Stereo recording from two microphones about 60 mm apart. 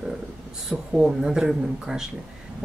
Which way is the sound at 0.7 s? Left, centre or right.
Centre.